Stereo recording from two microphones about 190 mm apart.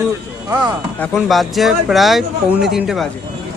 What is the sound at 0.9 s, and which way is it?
Speech, 5° left (ahead or behind).